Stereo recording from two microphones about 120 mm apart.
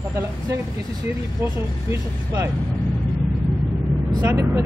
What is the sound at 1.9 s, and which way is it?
Speech, 30° right (ahead or behind).